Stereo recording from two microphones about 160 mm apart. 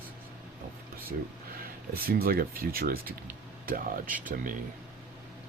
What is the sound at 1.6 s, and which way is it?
Speech, 70° right (ahead or behind).